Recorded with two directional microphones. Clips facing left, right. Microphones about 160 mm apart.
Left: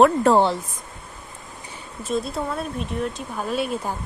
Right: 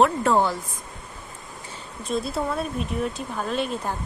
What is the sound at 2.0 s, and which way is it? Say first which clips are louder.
Speech: left 1 dB; centre (ahead or behind).